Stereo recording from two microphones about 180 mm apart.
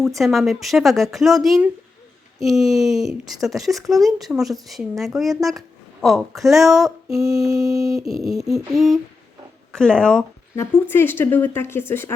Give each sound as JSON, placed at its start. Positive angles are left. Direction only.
{"t": 0.2, "sound": "speech", "side_deg": 0}
{"t": 7.4, "sound": "mantra", "side_deg": -20}
{"t": 8.2, "sound": "a woman's voice", "side_deg": 0}